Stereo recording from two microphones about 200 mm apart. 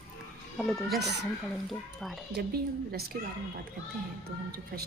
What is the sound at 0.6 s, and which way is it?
Speech, centre (ahead or behind).